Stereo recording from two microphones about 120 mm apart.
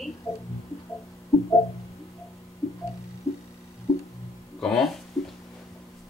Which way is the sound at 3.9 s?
30° left (ahead or behind).